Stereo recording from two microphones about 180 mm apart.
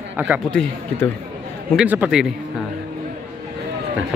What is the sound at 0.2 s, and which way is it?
Speech, 10° right (ahead or behind).